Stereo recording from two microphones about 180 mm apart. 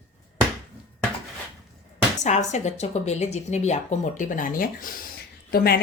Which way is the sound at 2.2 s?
40° left (ahead or behind).